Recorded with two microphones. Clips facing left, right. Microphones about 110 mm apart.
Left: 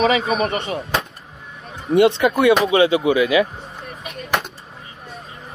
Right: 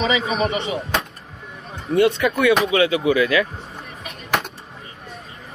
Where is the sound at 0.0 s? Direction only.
50° left (ahead or behind).